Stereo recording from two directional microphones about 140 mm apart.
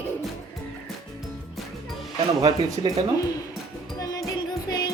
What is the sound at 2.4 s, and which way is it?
Speech, 30° right (ahead or behind).